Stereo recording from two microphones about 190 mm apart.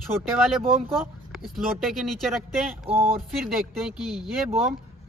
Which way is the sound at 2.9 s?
30° right (ahead or behind).